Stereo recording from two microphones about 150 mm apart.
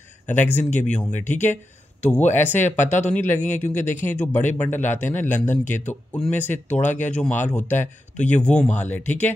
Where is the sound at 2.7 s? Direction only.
55° left (ahead or behind).